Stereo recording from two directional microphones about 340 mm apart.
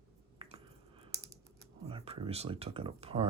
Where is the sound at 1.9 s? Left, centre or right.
Centre.